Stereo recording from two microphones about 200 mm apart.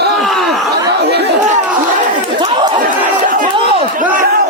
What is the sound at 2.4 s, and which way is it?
Chatter, 25° right (ahead or behind).